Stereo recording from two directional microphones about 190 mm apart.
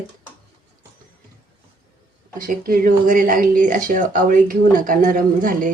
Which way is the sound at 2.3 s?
45° right (ahead or behind).